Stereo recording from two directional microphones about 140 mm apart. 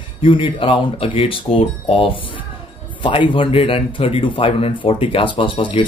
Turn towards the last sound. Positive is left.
turn(degrees=40)  # may be behind; listen again after turning